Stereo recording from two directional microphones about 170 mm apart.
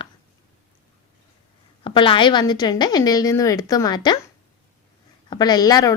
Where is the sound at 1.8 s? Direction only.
30° left (ahead or behind).